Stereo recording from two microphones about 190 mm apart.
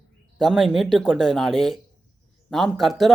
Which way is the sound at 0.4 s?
Centre (ahead or behind).